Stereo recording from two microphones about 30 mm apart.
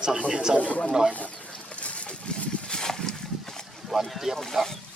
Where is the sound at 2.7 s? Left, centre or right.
Left.